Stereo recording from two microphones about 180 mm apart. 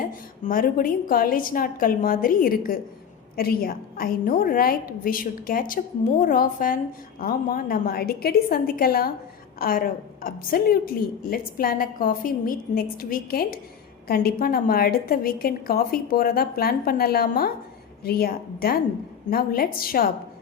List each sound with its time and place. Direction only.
0.0 s a woman's voice: 50° left (ahead or behind)